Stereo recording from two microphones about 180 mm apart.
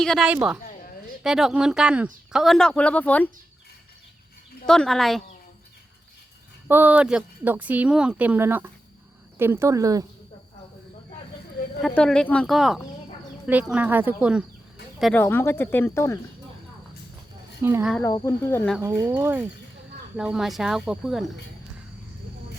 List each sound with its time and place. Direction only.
0.0 s speech: centre (ahead or behind)
4.6 s speech: 5° left (ahead or behind)
6.7 s speech: 10° right (ahead or behind)
11.8 s speech: 5° left (ahead or behind)
15.2 s speech: 10° left (ahead or behind)
17.6 s speech: 15° right (ahead or behind)
18.0 s speech: 20° left (ahead or behind)
18.8 s speech: 10° right (ahead or behind)